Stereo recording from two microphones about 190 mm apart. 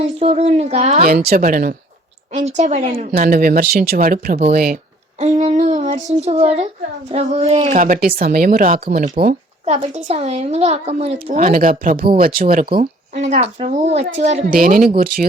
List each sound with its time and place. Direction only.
0.0 s speech: 30° right (ahead or behind)
1.0 s speech: 55° right (ahead or behind)
2.3 s speech: 35° right (ahead or behind)
3.1 s speech: 50° right (ahead or behind)
5.2 s child singing: 35° right (ahead or behind)
6.1 s speech: 35° right (ahead or behind)
9.6 s speech: 35° right (ahead or behind)
14.5 s speech: 50° right (ahead or behind)